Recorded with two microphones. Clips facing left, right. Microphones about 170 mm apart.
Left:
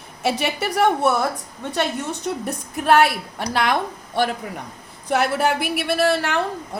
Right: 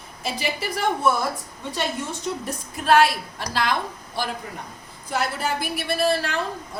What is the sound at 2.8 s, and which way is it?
A woman's voice, 60° left (ahead or behind).